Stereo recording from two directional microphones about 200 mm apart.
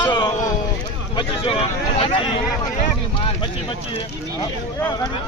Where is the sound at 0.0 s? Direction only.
20° left (ahead or behind).